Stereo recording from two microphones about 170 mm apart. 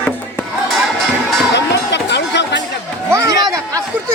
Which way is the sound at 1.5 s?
90° left.